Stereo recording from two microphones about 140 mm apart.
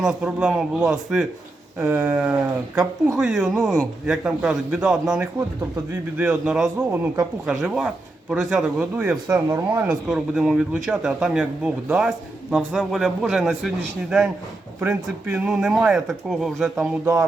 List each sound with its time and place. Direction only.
0.0 s a man's voice: 5° right (ahead or behind)
1.8 s a man's voice: 15° right (ahead or behind)
2.7 s speech: 5° right (ahead or behind)
6.9 s a man's voice: 15° right (ahead or behind)
7.4 s speech: 5° right (ahead or behind)